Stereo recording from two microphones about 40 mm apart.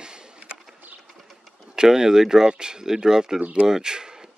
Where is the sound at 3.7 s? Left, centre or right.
Centre.